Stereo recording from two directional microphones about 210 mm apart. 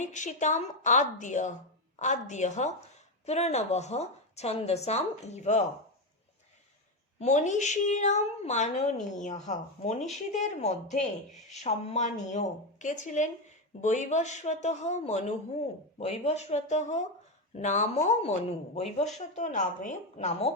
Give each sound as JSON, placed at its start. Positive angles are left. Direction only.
{"t": 0.0, "sound": "speech", "side_deg": 35}
{"t": 7.2, "sound": "speech", "side_deg": 35}